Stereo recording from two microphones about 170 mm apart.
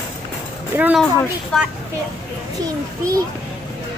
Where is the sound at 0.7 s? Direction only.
10° right (ahead or behind).